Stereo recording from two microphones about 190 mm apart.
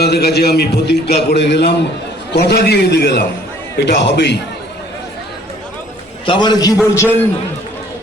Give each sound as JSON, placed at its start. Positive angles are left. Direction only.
{"t": 0.0, "sound": "a man's voice", "side_deg": 60}
{"t": 6.2, "sound": "a man's voice", "side_deg": 25}